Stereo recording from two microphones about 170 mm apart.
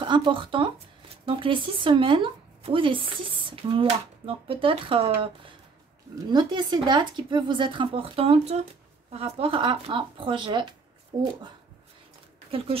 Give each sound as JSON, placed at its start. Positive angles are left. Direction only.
{"t": 0.0, "sound": "speech", "side_deg": -30}
{"t": 6.3, "sound": "speech", "side_deg": -25}
{"t": 12.4, "sound": "speech", "side_deg": -35}